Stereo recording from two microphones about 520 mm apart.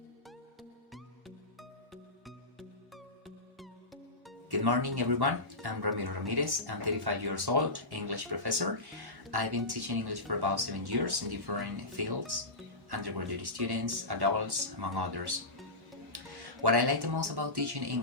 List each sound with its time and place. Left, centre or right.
1.9 s music: centre
4.5 s speech: right
16.1 s music: right
16.6 s speech: right